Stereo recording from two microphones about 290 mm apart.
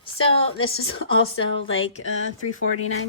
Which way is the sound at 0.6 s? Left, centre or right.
Left.